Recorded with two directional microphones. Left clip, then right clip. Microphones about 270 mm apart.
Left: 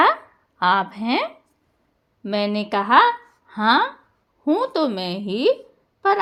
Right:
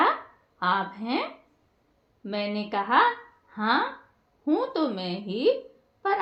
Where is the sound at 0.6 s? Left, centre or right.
Left.